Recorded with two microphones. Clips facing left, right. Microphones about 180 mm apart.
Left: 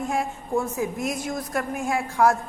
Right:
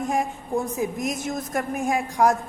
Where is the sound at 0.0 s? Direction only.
15° right (ahead or behind).